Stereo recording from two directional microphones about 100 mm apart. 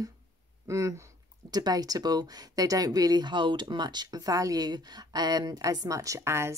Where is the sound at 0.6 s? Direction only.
30° right (ahead or behind).